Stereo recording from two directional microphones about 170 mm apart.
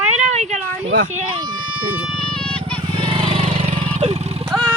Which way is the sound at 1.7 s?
10° right (ahead or behind).